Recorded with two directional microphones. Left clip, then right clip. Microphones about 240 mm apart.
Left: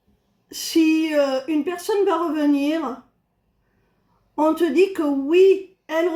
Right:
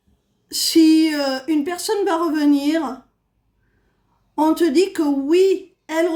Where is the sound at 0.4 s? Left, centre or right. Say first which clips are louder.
Right 5 dB; right.